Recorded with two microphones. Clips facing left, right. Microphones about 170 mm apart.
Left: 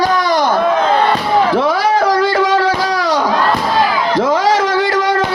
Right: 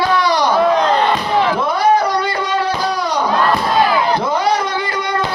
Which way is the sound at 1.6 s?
90° left.